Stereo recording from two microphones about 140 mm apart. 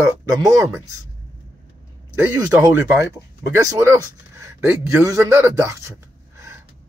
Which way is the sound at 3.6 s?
25° right (ahead or behind).